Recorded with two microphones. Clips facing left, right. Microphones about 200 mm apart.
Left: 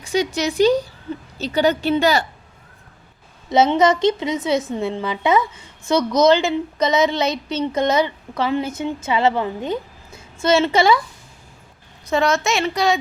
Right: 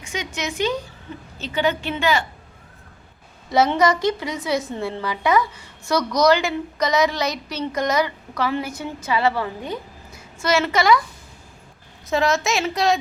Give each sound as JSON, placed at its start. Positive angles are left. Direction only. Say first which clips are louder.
{"t": 0.0, "sound": "a woman's voice", "louder": "left 8 dB", "side_deg": 35}
{"t": 3.5, "sound": "a woman's voice", "louder": "left 3 dB", "side_deg": 20}
{"t": 12.0, "sound": "a woman's voice", "louder": "left 2 dB", "side_deg": 0}